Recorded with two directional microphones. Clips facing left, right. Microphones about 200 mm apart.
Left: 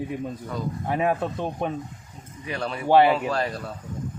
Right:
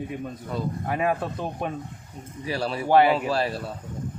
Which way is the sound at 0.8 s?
Centre (ahead or behind).